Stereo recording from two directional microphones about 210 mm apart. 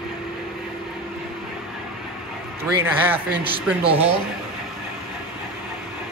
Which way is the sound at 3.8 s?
30° right (ahead or behind).